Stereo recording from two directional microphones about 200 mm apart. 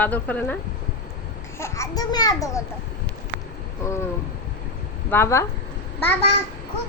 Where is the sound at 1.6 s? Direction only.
15° left (ahead or behind).